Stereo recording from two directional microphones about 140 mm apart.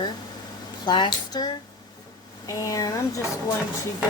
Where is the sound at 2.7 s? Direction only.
25° left (ahead or behind).